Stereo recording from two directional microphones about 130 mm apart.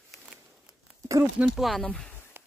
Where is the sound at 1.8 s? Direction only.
10° left (ahead or behind).